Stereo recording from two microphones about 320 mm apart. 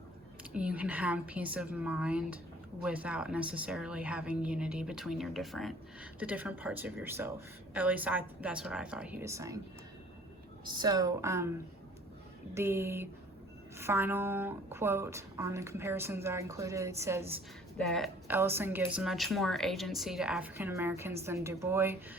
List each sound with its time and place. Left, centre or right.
0.5 s speech: centre
10.8 s a woman's voice: centre
12.5 s a woman's voice: centre